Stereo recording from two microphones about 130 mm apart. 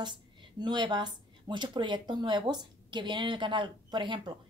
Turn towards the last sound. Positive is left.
turn(degrees=-35)  # may be behind; listen again after turning